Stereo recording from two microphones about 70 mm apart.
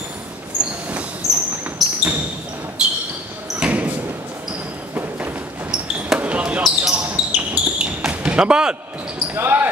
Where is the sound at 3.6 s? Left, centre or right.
Centre.